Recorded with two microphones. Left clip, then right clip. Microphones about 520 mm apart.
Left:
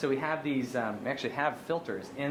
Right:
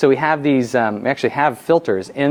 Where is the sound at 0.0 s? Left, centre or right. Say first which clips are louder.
Right 16 dB; right.